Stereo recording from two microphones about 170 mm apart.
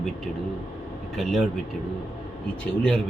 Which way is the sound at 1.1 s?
Centre (ahead or behind).